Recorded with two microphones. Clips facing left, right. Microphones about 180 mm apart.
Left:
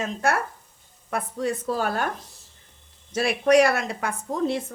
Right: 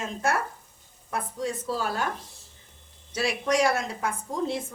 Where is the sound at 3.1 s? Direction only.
55° left (ahead or behind).